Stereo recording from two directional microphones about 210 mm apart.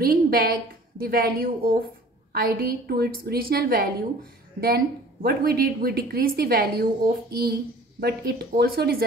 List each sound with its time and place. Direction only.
0.0 s a woman's voice: 45° right (ahead or behind)